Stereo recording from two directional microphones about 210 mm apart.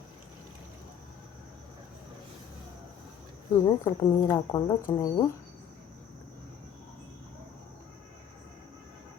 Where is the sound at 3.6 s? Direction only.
15° left (ahead or behind).